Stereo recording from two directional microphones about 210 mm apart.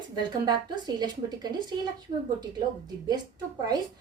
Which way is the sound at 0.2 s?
20° right (ahead or behind).